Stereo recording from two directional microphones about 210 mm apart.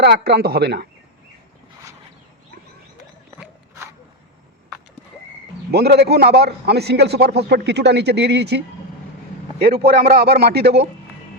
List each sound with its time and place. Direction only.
0.0 s a man's voice: 50° right (ahead or behind)
5.7 s a man's voice: 50° right (ahead or behind)